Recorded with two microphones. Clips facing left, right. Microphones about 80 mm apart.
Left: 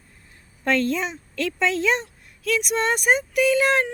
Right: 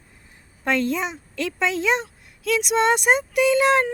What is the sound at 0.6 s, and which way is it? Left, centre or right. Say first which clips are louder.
A woman's voice: even; centre.